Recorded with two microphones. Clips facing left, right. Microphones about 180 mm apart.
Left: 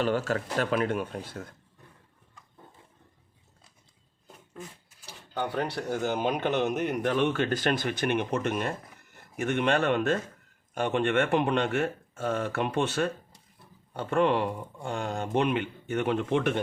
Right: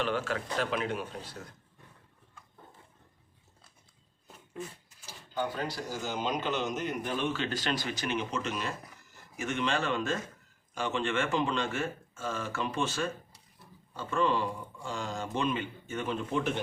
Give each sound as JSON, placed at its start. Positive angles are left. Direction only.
{"t": 0.0, "sound": "speech", "side_deg": 40}
{"t": 5.0, "sound": "speech", "side_deg": 65}